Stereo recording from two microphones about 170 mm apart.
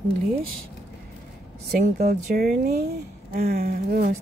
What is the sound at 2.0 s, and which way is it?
Speech, 65° right (ahead or behind).